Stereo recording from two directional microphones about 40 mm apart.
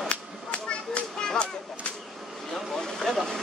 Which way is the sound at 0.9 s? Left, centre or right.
Left.